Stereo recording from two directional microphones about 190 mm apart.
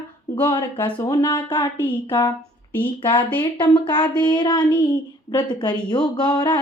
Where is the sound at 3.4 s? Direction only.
25° left (ahead or behind).